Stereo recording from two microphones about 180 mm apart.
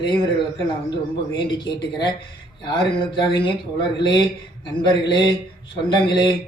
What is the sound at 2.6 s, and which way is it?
Speech, 25° left (ahead or behind).